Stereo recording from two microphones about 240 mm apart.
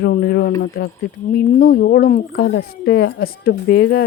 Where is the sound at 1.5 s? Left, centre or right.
Left.